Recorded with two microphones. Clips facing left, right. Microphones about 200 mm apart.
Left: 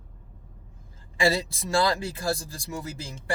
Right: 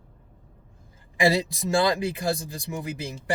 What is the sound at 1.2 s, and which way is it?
Speech, 15° right (ahead or behind).